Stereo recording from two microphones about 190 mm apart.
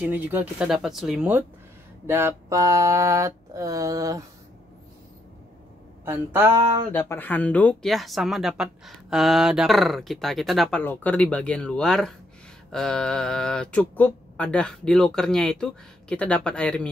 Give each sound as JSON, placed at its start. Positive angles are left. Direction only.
{"t": 0.0, "sound": "mantra", "side_deg": -10}
{"t": 6.0, "sound": "mantra", "side_deg": -10}
{"t": 6.9, "sound": "speech", "side_deg": 10}